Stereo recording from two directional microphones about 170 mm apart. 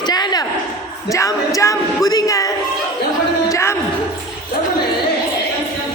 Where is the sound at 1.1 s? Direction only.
20° left (ahead or behind).